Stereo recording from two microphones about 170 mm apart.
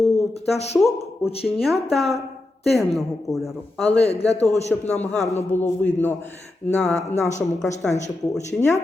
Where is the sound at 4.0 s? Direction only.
35° left (ahead or behind).